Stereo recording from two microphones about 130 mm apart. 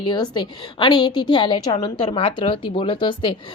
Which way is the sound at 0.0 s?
35° left (ahead or behind).